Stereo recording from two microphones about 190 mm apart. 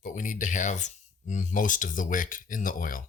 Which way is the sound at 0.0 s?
45° left (ahead or behind).